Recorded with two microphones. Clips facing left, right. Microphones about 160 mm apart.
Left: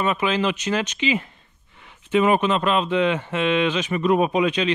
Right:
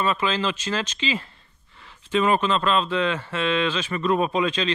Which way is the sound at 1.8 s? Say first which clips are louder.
Even; 35° right (ahead or behind).